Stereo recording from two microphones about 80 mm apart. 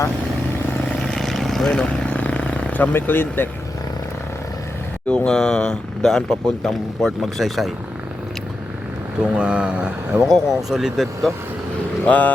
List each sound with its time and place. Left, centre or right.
0.9 s vehicle: centre; by 3.5 s left
5.0 s speech: centre
9.3 s speech: centre
10.2 s speech: centre
12.0 s speech: centre